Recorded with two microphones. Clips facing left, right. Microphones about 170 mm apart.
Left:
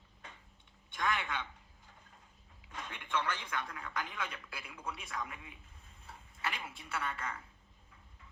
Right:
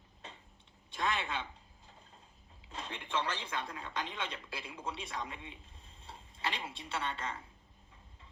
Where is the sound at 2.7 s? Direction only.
30° right (ahead or behind).